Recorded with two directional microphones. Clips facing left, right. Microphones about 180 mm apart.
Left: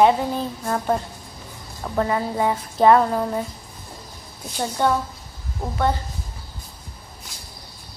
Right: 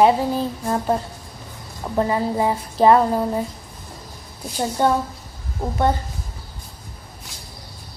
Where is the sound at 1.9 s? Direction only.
5° right (ahead or behind).